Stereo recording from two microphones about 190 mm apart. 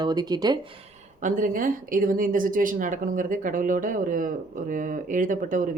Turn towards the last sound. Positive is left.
turn(degrees=-45)  # may be behind; listen again after turning